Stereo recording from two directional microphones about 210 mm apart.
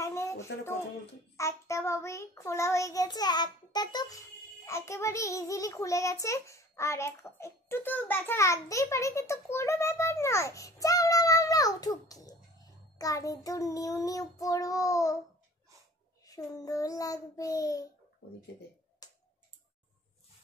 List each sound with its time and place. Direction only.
0.0 s music: 15° left (ahead or behind)
1.3 s a child's voice: 15° left (ahead or behind)
16.3 s a child's voice: 15° left (ahead or behind)
19.0 s tick: 20° left (ahead or behind)